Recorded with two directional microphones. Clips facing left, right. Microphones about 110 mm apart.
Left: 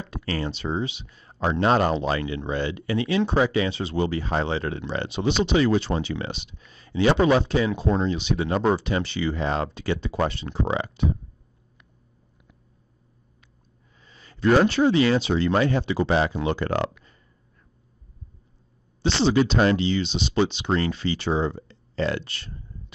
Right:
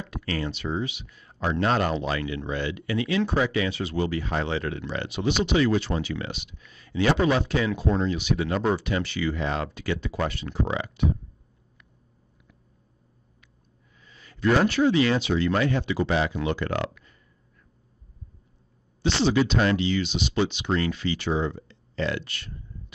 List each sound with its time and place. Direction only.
0.0 s speech: 30° left (ahead or behind)
14.0 s speech: 30° left (ahead or behind)
19.0 s speech: 30° left (ahead or behind)